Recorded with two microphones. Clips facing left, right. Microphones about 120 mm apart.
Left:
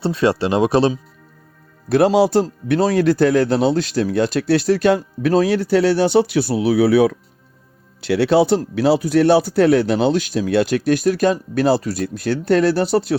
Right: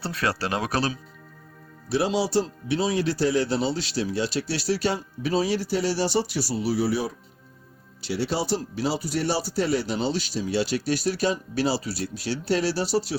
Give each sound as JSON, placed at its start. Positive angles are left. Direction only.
{"t": 0.0, "sound": "speech", "side_deg": 25}
{"t": 1.9, "sound": "speech", "side_deg": 55}